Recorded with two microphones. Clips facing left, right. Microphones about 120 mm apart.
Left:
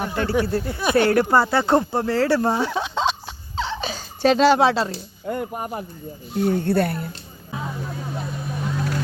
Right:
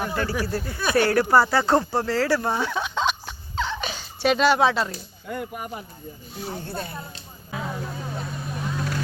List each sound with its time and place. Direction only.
0.0 s speech: 25° left (ahead or behind)
3.6 s a sound: 30° left (ahead or behind)
5.3 s speech: 45° left (ahead or behind)
6.3 s speech: 60° left (ahead or behind)